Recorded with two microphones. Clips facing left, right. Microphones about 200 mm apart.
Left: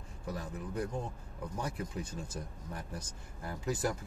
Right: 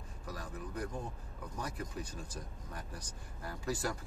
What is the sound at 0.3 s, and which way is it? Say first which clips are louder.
Speech: left 4 dB; 25° left (ahead or behind).